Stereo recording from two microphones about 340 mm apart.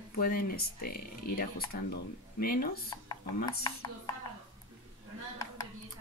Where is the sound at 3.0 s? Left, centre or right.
Centre.